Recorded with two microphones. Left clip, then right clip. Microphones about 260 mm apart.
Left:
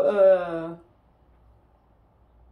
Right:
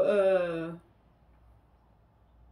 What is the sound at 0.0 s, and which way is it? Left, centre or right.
Speech, right.